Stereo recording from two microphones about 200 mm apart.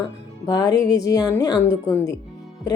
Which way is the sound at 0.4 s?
20° left (ahead or behind).